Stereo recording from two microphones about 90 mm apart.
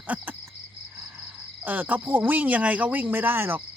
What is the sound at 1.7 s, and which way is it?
Speech, 20° right (ahead or behind).